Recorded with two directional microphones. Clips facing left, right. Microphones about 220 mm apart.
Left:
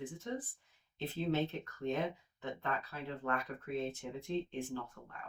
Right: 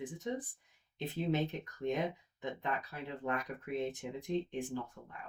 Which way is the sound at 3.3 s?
15° right (ahead or behind).